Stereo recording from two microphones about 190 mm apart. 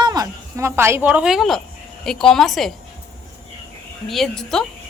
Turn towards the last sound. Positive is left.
turn(degrees=0)  # may be behind; listen again after turning